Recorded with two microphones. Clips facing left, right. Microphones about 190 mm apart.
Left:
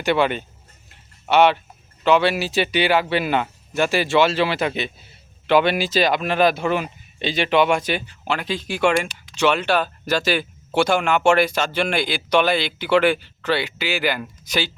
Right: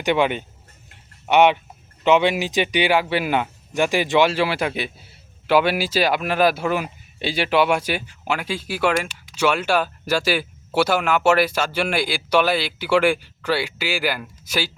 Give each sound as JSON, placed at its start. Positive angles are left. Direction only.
{"t": 0.0, "sound": "speech", "side_deg": -15}